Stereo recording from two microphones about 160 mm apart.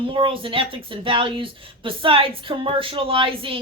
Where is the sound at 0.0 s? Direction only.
30° right (ahead or behind).